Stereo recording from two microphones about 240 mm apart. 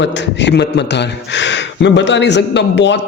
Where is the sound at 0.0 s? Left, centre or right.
Left.